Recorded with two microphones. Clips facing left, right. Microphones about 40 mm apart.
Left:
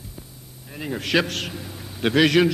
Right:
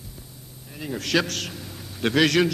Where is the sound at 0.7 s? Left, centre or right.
Centre.